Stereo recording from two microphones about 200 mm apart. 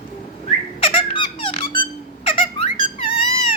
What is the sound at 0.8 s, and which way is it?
Squeak, 25° left (ahead or behind).